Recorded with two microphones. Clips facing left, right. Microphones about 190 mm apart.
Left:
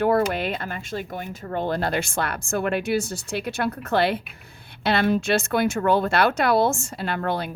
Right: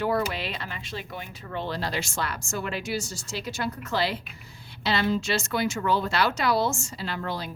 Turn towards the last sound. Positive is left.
turn(degrees=60)  # may be behind; listen again after turning